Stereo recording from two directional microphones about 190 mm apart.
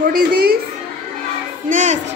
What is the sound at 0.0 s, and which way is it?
Speech, 50° right (ahead or behind).